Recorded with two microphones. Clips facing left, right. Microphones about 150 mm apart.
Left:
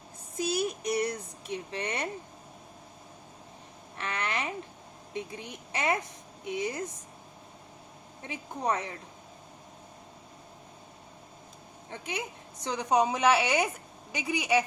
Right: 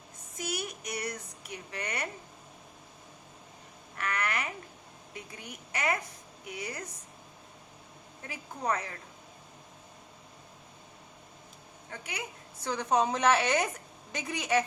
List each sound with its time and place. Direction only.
0.3 s child singing: 30° left (ahead or behind)
3.9 s a sound: 25° left (ahead or behind)
5.1 s a woman's voice: 25° left (ahead or behind)
8.2 s a woman's voice: 20° left (ahead or behind)
11.9 s a woman's voice: 25° left (ahead or behind)